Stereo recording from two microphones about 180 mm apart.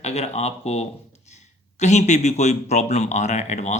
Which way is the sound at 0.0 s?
35° left (ahead or behind).